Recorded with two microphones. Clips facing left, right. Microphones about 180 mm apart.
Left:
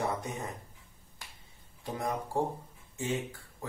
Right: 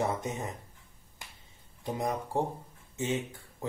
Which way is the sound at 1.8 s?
20° right (ahead or behind).